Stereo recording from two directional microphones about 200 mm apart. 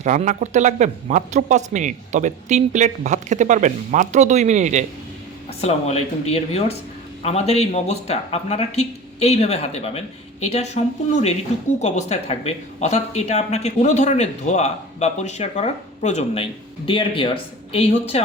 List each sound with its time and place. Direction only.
0.0 s speech: 35° right (ahead or behind)
5.5 s speech: 30° left (ahead or behind)